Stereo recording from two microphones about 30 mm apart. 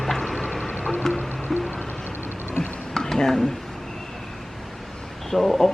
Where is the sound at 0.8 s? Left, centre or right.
Right.